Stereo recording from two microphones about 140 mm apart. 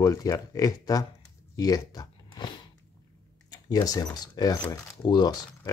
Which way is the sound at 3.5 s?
25° left (ahead or behind).